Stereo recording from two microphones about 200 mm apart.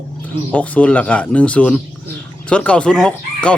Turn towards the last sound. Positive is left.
turn(degrees=5)  # may be behind; listen again after turning